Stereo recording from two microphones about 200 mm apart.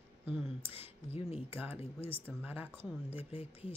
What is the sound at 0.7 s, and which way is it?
Speech, 30° left (ahead or behind).